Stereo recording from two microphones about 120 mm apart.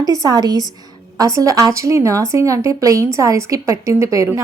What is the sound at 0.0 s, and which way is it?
A woman's voice, 30° right (ahead or behind).